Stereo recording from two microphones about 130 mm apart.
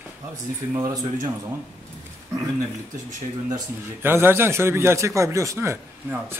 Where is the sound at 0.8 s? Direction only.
30° right (ahead or behind).